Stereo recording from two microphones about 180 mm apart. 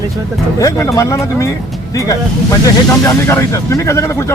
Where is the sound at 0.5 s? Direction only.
20° left (ahead or behind).